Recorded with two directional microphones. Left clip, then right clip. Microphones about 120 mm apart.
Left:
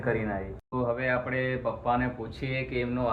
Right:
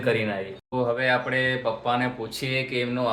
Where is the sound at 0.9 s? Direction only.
25° right (ahead or behind).